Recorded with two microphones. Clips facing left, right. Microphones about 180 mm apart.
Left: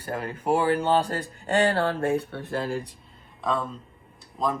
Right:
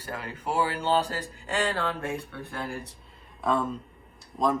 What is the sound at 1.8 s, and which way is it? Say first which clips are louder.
Speech: left 6 dB; 35° left (ahead or behind).